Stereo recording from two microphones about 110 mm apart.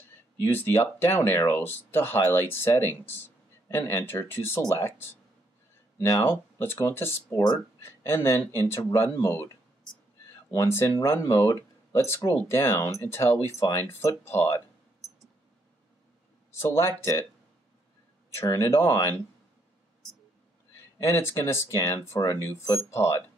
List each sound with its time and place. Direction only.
0.4 s speech: 20° left (ahead or behind)
10.5 s speech: 25° left (ahead or behind)
16.5 s speech: 25° left (ahead or behind)
18.3 s speech: 25° left (ahead or behind)
21.0 s speech: 25° left (ahead or behind)